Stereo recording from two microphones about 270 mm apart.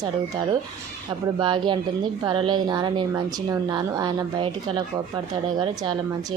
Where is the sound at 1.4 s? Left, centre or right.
Centre.